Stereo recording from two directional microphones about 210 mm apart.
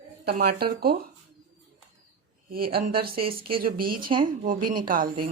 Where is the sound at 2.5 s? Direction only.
45° right (ahead or behind).